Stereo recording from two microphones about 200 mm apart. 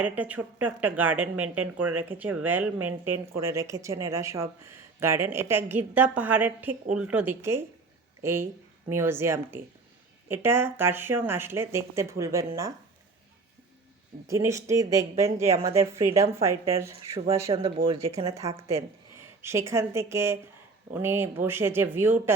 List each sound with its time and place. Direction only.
0.0 s a woman's voice: 10° right (ahead or behind)
14.3 s speech: 15° right (ahead or behind)
17.5 s speech: 25° right (ahead or behind)
19.4 s speech: 15° right (ahead or behind)